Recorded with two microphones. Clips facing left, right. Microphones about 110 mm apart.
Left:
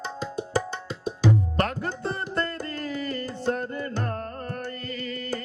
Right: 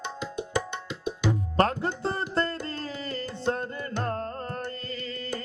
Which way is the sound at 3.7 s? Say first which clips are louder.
Left 3 dB; 30° left (ahead or behind).